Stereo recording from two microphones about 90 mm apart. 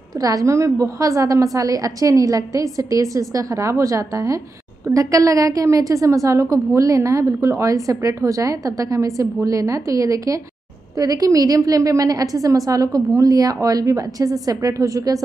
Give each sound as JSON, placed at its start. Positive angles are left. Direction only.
{"t": 0.2, "sound": "a woman's voice", "side_deg": -40}